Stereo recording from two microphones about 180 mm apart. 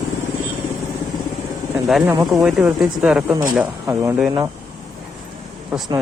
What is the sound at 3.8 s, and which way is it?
Speech, 15° right (ahead or behind).